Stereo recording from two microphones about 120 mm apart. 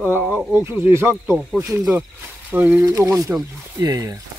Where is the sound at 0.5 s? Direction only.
20° right (ahead or behind).